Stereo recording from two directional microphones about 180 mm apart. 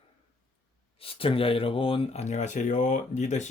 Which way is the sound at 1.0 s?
30° left (ahead or behind).